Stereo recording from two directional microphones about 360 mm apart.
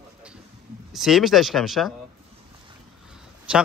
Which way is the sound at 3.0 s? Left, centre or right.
Centre.